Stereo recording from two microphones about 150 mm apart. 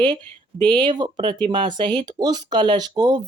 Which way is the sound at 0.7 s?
30° right (ahead or behind).